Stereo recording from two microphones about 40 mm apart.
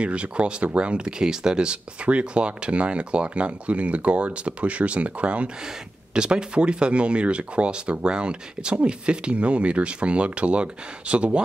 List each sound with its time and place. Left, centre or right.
0.0 s speech: right
6.1 s speech: right